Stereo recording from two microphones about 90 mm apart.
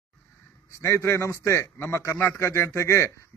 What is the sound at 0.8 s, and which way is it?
A man's voice, 30° left (ahead or behind).